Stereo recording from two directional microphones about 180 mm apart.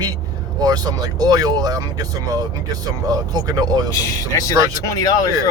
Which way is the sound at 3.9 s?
20° left (ahead or behind).